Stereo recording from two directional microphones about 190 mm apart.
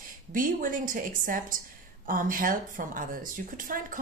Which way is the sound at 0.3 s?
45° right (ahead or behind).